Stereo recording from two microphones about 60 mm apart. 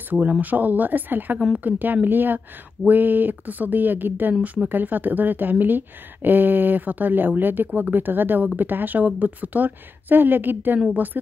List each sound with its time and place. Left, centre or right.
0.1 s a woman's voice: right